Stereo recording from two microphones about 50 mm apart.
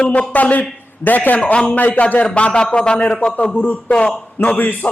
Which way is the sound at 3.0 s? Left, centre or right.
Left.